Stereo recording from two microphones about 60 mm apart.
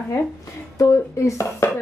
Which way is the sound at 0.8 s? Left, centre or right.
Left.